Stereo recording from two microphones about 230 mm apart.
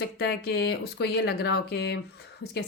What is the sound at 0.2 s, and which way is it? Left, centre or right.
A woman's voice, left.